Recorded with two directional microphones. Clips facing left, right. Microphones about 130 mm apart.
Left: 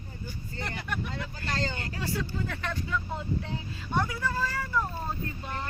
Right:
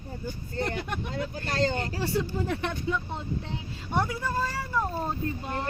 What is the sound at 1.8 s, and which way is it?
Speech, 30° right (ahead or behind).